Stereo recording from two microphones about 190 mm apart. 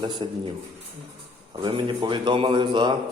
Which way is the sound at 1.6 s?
25° right (ahead or behind).